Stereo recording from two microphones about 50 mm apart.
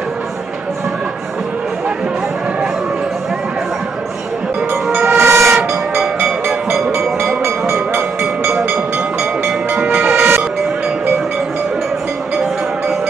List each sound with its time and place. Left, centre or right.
5.0 s train: right
8.5 s a sound: right
10.1 s vehicle: right